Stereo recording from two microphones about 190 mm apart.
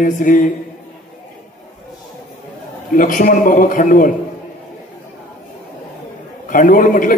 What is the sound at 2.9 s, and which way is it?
A man's voice, 45° left (ahead or behind).